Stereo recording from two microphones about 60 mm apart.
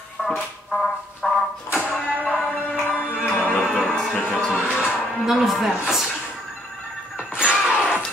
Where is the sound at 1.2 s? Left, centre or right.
Centre.